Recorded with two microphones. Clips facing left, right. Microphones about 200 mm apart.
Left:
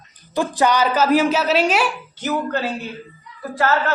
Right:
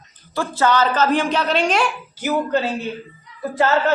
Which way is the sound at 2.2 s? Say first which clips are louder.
Right 3 dB; 15° right (ahead or behind).